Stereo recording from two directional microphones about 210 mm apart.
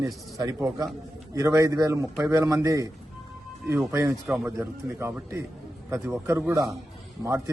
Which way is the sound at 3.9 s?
15° right (ahead or behind).